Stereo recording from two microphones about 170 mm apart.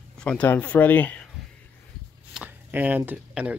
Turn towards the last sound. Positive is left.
turn(degrees=-5)  # may be behind; listen again after turning